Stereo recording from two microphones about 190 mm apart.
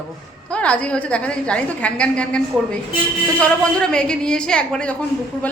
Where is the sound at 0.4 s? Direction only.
5° left (ahead or behind).